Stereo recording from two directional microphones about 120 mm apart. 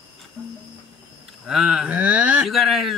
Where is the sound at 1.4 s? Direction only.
Centre (ahead or behind).